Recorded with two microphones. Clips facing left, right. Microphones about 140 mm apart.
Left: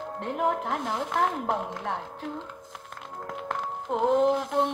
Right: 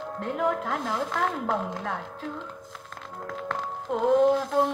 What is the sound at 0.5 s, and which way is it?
Speech, 25° left (ahead or behind).